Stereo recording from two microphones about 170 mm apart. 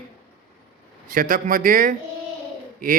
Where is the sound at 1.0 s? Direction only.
55° right (ahead or behind).